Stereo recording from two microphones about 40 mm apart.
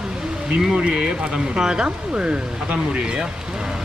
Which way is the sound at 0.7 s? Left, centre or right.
Right.